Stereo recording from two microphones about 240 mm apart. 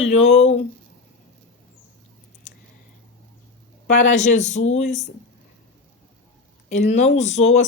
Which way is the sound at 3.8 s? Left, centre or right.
Left.